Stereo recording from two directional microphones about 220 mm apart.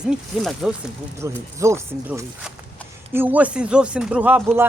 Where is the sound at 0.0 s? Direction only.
5° right (ahead or behind).